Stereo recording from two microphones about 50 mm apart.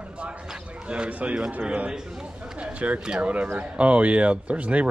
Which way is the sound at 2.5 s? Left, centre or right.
Right.